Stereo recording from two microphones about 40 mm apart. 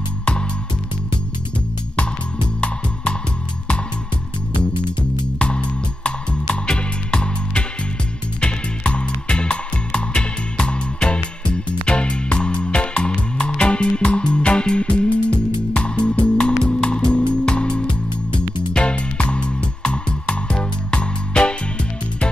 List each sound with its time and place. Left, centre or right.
5.4 s music: left